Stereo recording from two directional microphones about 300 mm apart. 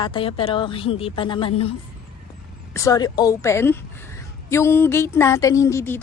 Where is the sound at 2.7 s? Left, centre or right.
Centre.